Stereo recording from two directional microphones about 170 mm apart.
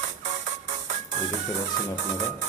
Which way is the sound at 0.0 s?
45° right (ahead or behind).